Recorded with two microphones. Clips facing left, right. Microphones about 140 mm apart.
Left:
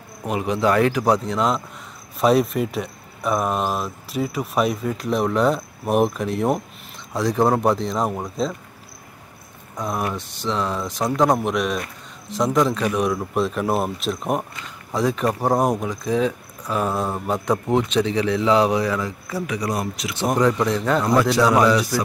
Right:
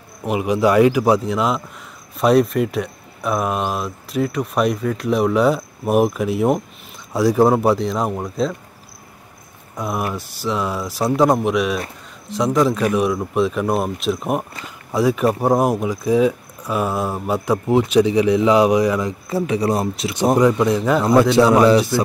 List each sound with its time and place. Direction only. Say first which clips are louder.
0.3 s speech: right 3 dB; 10° right (ahead or behind)
9.8 s speech: right 2 dB; 5° right (ahead or behind); by 20.2 s 30° right (ahead or behind)
20.3 s speech: right 2 dB; 10° right (ahead or behind)
21.0 s a man's voice: right 6 dB; 25° right (ahead or behind)